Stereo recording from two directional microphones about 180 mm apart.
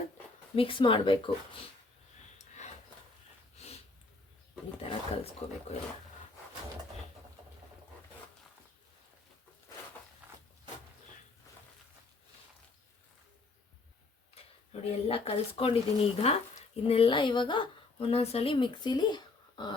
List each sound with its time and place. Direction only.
0.5 s speech: 30° left (ahead or behind)
2.4 s a sound: 40° left (ahead or behind)
3.6 s snort: 35° left (ahead or behind)
4.8 s speech: 35° left (ahead or behind)
14.3 s a sound: 35° left (ahead or behind)
14.7 s speech: 35° left (ahead or behind)